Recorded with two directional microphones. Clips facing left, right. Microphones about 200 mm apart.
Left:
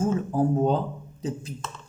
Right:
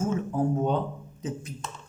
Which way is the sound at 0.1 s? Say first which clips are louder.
Left 3 dB; 35° left (ahead or behind).